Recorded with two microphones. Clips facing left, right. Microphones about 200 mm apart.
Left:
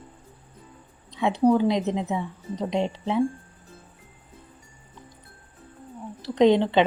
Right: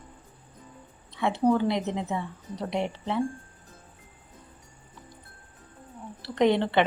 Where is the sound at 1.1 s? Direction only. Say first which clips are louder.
Left 3 dB; 15° left (ahead or behind).